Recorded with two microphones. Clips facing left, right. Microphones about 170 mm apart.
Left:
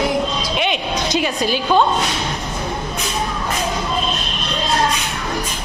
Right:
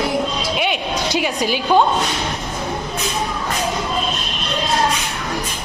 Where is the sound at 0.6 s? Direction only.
10° right (ahead or behind).